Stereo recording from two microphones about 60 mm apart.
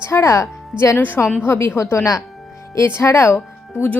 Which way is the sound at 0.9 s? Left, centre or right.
Left.